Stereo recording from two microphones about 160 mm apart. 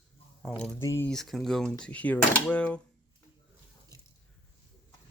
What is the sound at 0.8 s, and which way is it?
Speech, 20° left (ahead or behind).